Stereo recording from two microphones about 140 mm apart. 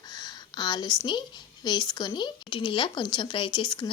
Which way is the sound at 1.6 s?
30° left (ahead or behind).